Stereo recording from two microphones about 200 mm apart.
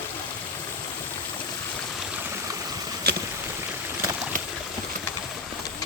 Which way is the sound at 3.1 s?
55° right (ahead or behind).